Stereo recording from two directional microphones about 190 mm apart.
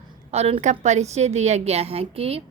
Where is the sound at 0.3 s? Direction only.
35° right (ahead or behind).